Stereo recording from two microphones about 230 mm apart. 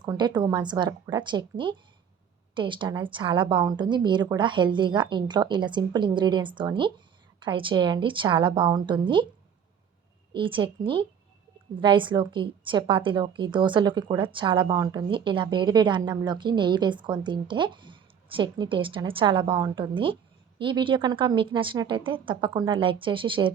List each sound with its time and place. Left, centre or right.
0.0 s a woman's voice: centre
10.3 s a woman's voice: right